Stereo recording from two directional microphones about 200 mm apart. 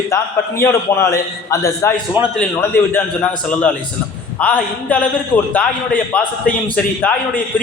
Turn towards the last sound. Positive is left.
turn(degrees=5)  # may be behind; listen again after turning